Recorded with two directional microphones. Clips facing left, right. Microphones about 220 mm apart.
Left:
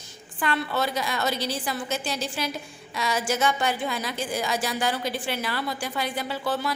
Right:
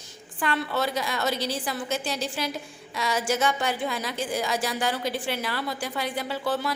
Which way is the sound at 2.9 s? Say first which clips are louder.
Even; 50° right (ahead or behind).